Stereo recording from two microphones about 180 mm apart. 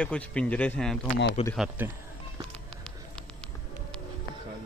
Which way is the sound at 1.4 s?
35° left (ahead or behind).